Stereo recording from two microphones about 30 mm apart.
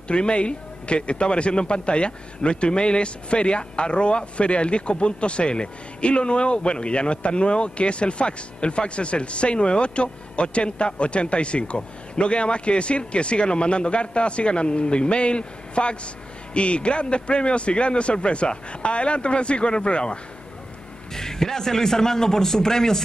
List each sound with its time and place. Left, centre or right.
0.1 s a man's voice: left
21.1 s a man's voice: centre